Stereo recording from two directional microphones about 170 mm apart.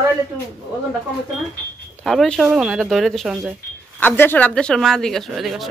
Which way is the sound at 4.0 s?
10° left (ahead or behind).